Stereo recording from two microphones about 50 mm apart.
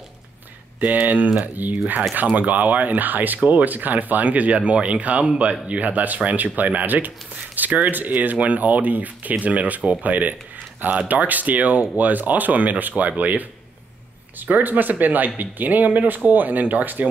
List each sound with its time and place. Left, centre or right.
0.7 s speech: right